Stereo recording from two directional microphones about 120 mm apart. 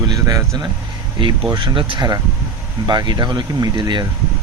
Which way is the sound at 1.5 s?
40° right (ahead or behind).